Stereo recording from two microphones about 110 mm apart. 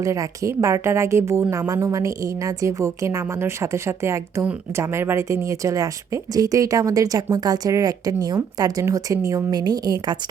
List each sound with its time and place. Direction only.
0.0 s a woman's voice: 30° right (ahead or behind)